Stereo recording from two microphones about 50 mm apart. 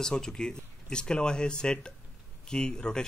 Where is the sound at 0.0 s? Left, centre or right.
Centre.